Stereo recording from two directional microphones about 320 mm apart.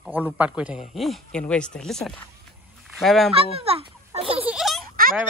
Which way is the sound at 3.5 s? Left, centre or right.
Centre.